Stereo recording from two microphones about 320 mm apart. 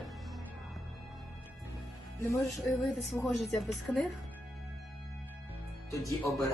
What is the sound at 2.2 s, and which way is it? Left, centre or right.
Speech, centre.